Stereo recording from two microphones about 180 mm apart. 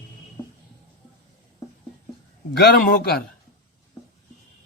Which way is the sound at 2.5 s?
60° left (ahead or behind).